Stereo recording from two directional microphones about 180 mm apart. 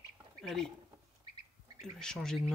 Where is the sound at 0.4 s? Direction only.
Centre (ahead or behind).